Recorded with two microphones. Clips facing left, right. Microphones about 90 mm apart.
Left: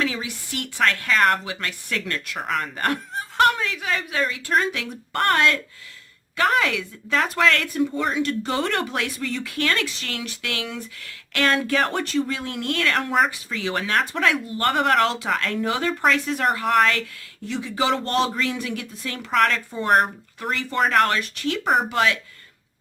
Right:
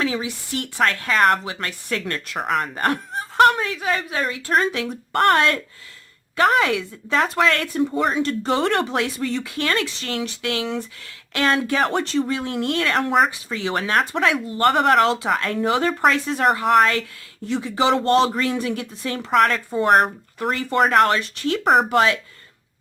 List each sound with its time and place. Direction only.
0.0 s speech: 25° right (ahead or behind)
21.0 s speech: 25° right (ahead or behind)
21.6 s speech: 60° right (ahead or behind)
21.8 s speech: 35° right (ahead or behind)